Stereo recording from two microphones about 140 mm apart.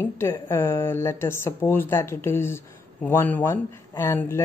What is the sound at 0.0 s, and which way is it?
Speech, 20° left (ahead or behind).